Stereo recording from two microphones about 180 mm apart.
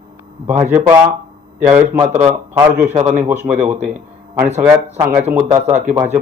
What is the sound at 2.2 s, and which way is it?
A man's voice, 10° right (ahead or behind).